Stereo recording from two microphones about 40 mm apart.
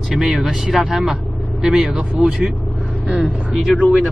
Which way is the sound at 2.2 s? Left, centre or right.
Right.